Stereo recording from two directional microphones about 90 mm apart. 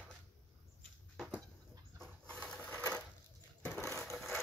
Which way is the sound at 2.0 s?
10° left (ahead or behind).